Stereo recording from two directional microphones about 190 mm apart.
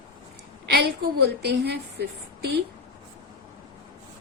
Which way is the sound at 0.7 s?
60° right (ahead or behind).